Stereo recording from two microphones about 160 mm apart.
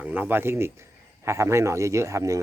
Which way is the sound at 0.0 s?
10° right (ahead or behind).